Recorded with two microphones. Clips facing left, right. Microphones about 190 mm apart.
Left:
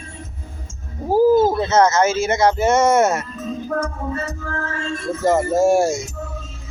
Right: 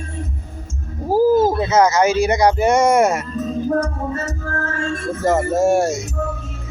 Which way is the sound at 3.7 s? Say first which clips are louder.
Right 1 dB; 40° right (ahead or behind).